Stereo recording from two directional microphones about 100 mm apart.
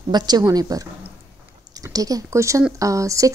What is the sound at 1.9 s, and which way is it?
Speech, 35° right (ahead or behind).